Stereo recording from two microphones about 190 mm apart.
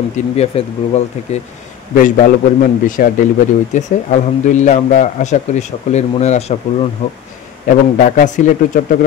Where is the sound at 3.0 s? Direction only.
45° left (ahead or behind).